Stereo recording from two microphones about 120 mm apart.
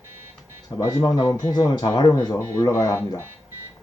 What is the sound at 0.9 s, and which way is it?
Speech, 30° left (ahead or behind).